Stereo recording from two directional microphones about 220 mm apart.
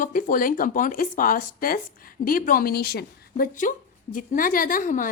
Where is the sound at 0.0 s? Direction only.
40° left (ahead or behind).